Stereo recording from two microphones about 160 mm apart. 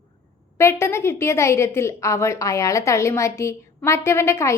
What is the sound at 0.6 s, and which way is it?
A woman's voice, 15° left (ahead or behind).